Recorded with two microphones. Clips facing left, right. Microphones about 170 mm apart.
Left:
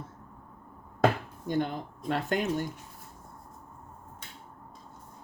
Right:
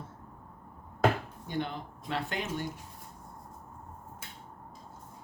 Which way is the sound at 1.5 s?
45° left (ahead or behind).